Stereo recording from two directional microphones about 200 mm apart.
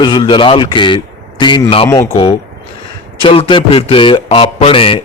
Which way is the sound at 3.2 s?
25° left (ahead or behind).